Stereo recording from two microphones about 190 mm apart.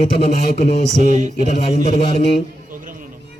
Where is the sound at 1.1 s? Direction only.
40° right (ahead or behind).